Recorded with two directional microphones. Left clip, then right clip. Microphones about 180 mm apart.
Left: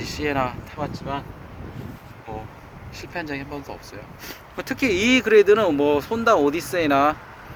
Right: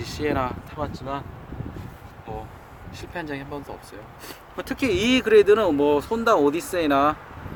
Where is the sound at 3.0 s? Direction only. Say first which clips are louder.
Left 2 dB; 15° left (ahead or behind).